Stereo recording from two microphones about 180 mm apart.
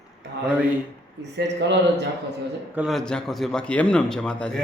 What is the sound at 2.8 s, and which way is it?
A man's voice, centre (ahead or behind).